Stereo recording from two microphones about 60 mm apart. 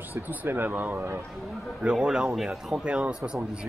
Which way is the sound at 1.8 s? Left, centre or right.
Centre.